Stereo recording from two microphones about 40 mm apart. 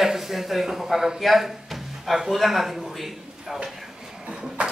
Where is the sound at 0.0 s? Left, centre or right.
Centre.